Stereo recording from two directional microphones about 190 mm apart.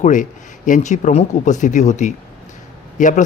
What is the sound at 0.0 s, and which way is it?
Speech, 40° left (ahead or behind).